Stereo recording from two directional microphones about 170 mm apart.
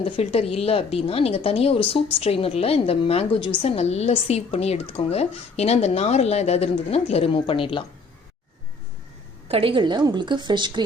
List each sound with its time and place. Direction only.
0.0 s a woman's voice: 35° left (ahead or behind)
9.5 s a woman's voice: 35° right (ahead or behind)